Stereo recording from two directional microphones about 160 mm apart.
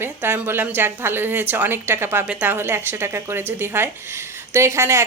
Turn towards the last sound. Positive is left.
turn(degrees=-15)  # may be behind; listen again after turning